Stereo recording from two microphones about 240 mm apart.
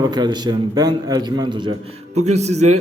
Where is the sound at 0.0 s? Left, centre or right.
Centre.